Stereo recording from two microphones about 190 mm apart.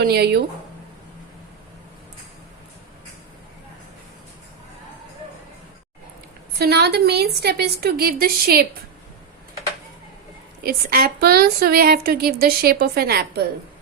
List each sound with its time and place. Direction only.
0.0 s speech: 55° right (ahead or behind)
6.6 s a woman's voice: 60° right (ahead or behind)
10.6 s a woman's voice: 55° right (ahead or behind)